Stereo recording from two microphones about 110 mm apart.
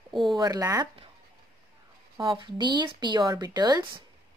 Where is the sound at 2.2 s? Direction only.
45° right (ahead or behind).